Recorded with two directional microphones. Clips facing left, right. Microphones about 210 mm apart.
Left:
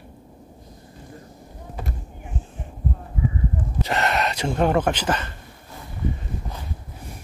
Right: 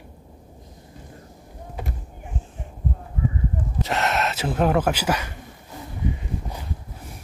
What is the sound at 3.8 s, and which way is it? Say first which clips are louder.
Speech: left 1 dB; centre (ahead or behind).